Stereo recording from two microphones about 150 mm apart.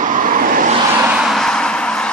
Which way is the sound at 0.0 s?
60° right (ahead or behind).